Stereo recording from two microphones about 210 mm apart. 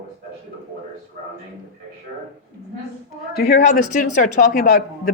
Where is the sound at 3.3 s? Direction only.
40° left (ahead or behind).